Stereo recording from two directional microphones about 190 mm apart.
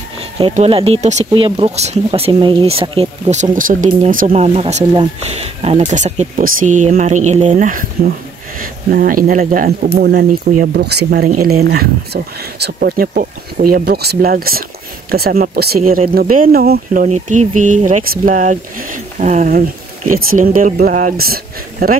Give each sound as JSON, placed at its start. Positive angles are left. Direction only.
{"t": 0.4, "sound": "speech", "side_deg": -30}
{"t": 4.6, "sound": "speech", "side_deg": -35}
{"t": 11.2, "sound": "speech", "side_deg": -40}